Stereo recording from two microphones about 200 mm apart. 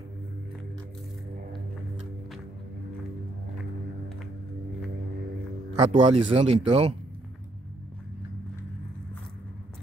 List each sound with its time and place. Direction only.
5.9 s speech: 30° right (ahead or behind)